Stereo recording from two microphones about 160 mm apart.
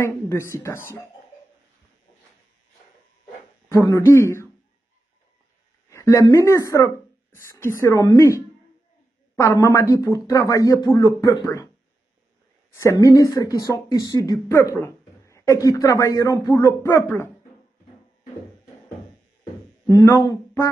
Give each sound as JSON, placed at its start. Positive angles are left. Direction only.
{"t": 0.0, "sound": "a woman's voice", "side_deg": 15}
{"t": 3.6, "sound": "a woman's voice", "side_deg": 20}
{"t": 5.9, "sound": "speech", "side_deg": 20}
{"t": 12.7, "sound": "speech", "side_deg": 20}
{"t": 19.9, "sound": "speech", "side_deg": 20}